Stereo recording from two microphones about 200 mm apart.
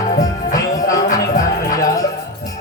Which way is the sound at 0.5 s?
15° left (ahead or behind).